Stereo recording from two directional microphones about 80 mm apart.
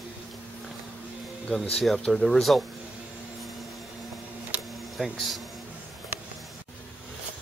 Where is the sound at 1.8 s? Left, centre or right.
Centre.